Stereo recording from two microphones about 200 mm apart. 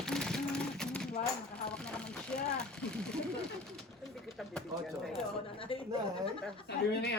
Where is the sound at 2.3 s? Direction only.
5° left (ahead or behind).